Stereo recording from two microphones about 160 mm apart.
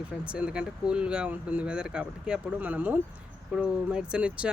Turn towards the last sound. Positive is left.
turn(degrees=-5)  # may be behind; listen again after turning